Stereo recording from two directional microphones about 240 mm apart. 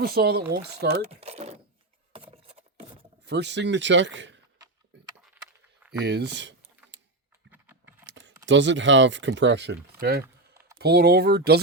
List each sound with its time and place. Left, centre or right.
0.0 s speech: right
1.0 s speech: right
2.1 s a sound: right
3.2 s speech: right
5.9 s speech: right
7.5 s keys jangling: centre
8.0 s computer keyboard: right
8.4 s speech: right